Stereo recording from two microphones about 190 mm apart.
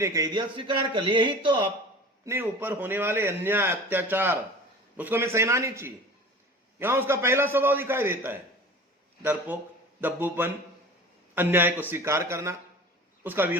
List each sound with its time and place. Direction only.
0.0 s speech: 15° right (ahead or behind)
2.2 s a man's voice: 10° right (ahead or behind)